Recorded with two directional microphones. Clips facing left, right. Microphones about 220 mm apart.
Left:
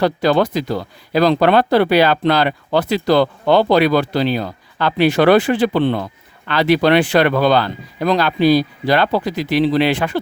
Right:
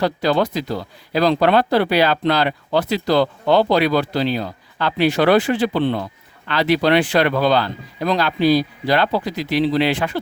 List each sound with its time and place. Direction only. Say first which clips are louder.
0.0 s speech: left 3 dB; 55° left (ahead or behind)